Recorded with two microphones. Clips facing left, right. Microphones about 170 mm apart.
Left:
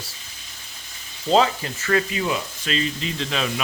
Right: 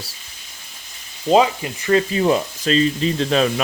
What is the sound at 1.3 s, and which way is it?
Frying, 15° right (ahead or behind).